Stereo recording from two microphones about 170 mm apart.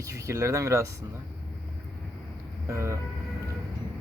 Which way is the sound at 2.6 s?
15° right (ahead or behind).